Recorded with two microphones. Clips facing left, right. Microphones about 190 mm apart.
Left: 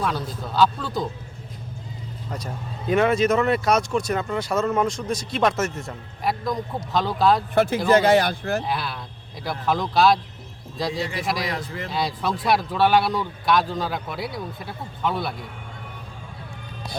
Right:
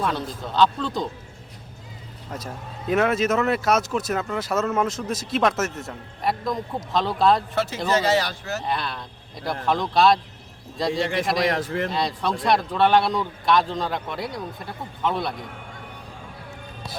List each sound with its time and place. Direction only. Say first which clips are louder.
0.0 s speech: even; centre (ahead or behind)
2.3 s speech: even; centre (ahead or behind)
7.5 s speech: left 5 dB; 55° left (ahead or behind)
8.6 s speech: even; 5° left (ahead or behind)